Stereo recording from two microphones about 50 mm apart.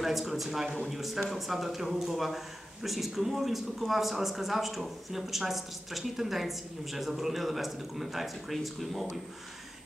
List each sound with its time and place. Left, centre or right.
0.0 s a man's voice: centre